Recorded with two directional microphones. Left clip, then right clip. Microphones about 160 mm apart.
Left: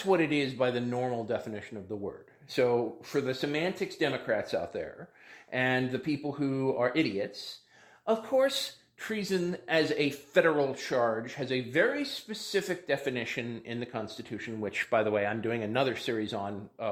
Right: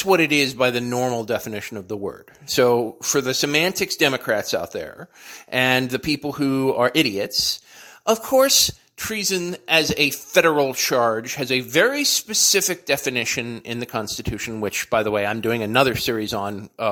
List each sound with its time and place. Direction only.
0.0 s speech: 30° right (ahead or behind)
9.0 s a man's voice: 20° right (ahead or behind)
10.4 s speech: 35° right (ahead or behind)
14.8 s speech: 25° right (ahead or behind)